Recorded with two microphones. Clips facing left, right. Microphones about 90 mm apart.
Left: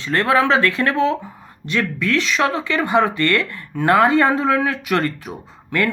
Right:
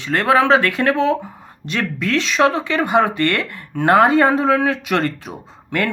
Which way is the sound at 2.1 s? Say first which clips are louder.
Right 3 dB; 25° right (ahead or behind).